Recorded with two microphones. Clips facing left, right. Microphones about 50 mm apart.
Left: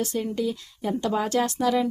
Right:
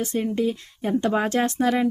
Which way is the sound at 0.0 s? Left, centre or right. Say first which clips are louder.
Right 3 dB; right.